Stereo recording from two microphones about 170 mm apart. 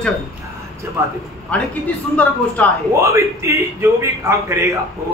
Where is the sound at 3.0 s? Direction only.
20° right (ahead or behind).